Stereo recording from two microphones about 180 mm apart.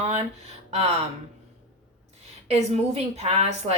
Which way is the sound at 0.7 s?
35° right (ahead or behind).